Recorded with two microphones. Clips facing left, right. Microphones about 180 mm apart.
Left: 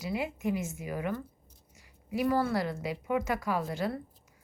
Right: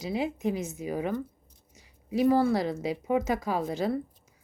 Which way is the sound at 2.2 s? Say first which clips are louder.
Right 5 dB; 20° right (ahead or behind).